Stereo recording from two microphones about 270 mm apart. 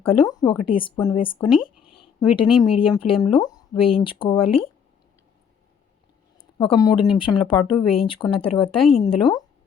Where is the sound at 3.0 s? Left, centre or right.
Left.